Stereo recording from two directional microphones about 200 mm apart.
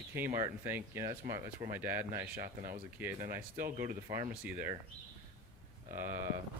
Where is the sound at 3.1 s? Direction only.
45° right (ahead or behind).